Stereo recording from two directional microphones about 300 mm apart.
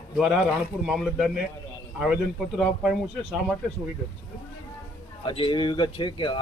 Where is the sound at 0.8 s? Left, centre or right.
Centre.